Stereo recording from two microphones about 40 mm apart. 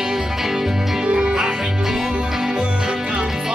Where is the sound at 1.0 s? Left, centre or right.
Right.